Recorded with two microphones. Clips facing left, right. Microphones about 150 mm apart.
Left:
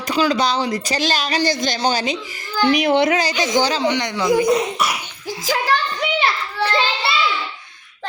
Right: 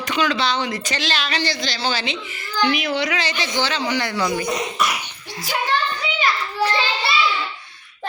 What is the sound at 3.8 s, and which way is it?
Speech, 20° left (ahead or behind).